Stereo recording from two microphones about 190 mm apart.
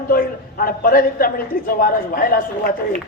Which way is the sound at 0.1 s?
50° left (ahead or behind).